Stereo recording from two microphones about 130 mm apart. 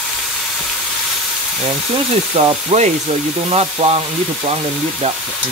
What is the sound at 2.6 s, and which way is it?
Frying, 60° right (ahead or behind).